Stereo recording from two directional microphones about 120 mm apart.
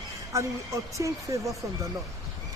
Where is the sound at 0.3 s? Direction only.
25° right (ahead or behind).